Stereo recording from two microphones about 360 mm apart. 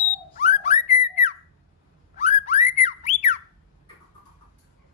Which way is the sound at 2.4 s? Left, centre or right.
Centre.